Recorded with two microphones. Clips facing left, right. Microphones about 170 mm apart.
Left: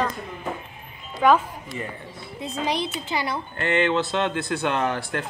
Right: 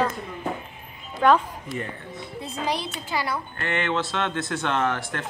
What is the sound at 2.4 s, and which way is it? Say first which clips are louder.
A woman's voice: left 3 dB; 20° left (ahead or behind).